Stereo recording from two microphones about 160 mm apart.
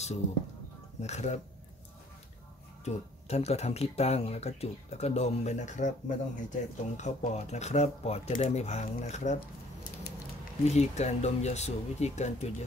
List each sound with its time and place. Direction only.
1.0 s speech: 45° left (ahead or behind)
2.8 s speech: 40° left (ahead or behind)
10.6 s speech: 45° left (ahead or behind)